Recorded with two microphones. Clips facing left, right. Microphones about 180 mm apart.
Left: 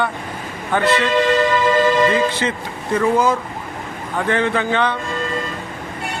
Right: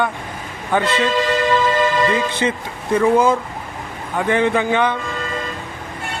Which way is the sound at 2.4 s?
20° right (ahead or behind).